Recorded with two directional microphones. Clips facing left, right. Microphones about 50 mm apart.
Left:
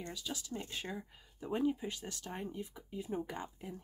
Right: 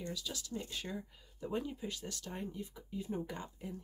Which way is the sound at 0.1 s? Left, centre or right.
Left.